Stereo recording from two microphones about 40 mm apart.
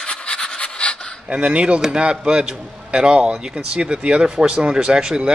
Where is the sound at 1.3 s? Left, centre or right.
Right.